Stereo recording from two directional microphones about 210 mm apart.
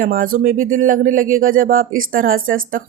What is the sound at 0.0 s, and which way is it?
Speech, 40° right (ahead or behind).